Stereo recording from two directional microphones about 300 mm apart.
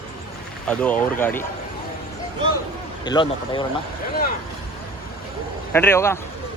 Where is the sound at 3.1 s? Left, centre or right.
Centre.